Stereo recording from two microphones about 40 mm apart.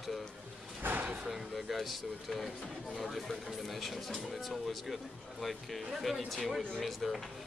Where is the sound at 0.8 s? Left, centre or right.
Right.